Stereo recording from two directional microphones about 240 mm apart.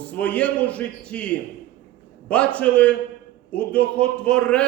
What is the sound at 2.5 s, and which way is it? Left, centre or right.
A man's voice, centre.